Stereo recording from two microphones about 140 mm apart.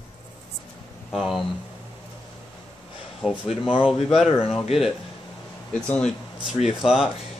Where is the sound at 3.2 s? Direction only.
5° right (ahead or behind).